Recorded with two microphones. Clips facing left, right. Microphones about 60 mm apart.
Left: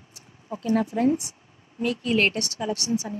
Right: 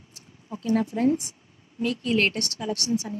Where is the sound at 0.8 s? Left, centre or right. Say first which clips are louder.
Left 1 dB; centre.